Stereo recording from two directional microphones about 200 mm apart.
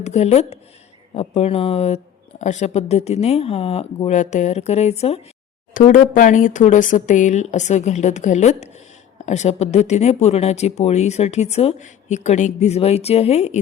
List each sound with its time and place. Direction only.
0.0 s speech: 35° left (ahead or behind)